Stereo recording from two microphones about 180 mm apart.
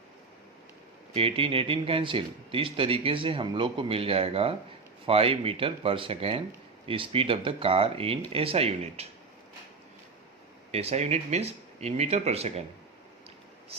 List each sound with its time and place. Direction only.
1.1 s speech: 30° right (ahead or behind)
10.7 s speech: 35° right (ahead or behind)